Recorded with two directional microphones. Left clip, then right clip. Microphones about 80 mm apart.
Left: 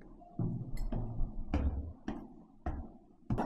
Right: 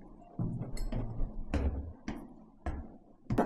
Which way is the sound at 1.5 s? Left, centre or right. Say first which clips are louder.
Right 2 dB; right.